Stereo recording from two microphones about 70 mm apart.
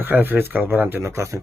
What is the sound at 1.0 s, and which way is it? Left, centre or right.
Speech, right.